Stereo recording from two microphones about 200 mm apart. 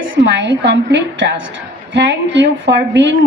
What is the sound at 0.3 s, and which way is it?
A woman's voice, 60° right (ahead or behind).